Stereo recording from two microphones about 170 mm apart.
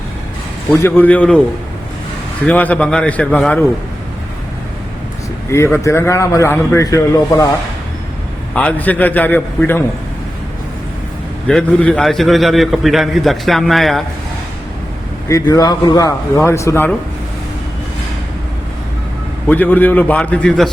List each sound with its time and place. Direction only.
0.7 s a man's voice: 10° left (ahead or behind)
2.5 s a man's voice: 10° left (ahead or behind)
5.5 s a man's voice: 15° left (ahead or behind)
8.5 s a man's voice: 10° left (ahead or behind)
11.4 s a man's voice: 5° left (ahead or behind)
15.3 s a man's voice: 20° left (ahead or behind)
19.5 s a man's voice: 10° left (ahead or behind)